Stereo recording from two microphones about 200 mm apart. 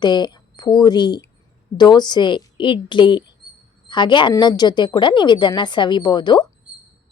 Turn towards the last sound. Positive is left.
turn(degrees=20)  # may be behind; listen again after turning